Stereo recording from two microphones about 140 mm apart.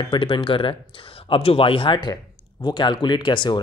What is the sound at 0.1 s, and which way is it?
Speech, 40° left (ahead or behind).